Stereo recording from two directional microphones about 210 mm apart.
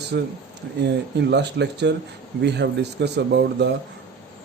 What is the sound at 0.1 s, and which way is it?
Speech, 50° right (ahead or behind).